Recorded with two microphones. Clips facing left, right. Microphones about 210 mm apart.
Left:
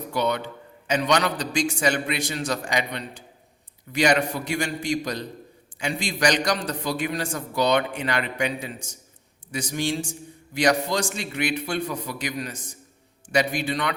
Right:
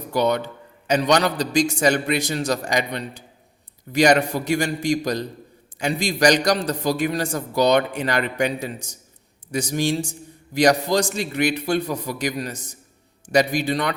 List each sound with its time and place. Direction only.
0.1 s a man's voice: 40° right (ahead or behind)